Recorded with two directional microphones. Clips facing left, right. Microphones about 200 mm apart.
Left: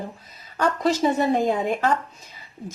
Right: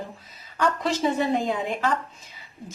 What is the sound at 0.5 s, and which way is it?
Speech, 40° left (ahead or behind).